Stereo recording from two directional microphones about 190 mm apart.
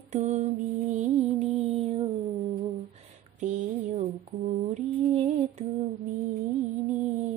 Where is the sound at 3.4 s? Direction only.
35° right (ahead or behind).